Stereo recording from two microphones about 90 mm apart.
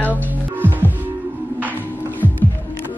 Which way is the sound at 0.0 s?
20° left (ahead or behind).